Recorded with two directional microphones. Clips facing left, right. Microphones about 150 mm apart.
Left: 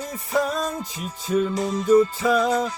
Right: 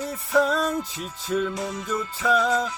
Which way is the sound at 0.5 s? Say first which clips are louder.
Right 2 dB; 15° left (ahead or behind).